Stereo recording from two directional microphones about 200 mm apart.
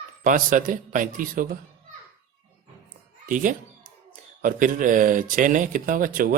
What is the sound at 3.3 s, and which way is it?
Music, 40° right (ahead or behind).